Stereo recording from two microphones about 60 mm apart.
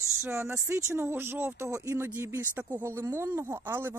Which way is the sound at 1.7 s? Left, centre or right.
Right.